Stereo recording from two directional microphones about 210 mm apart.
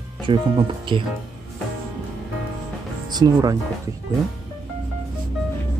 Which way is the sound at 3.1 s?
20° right (ahead or behind).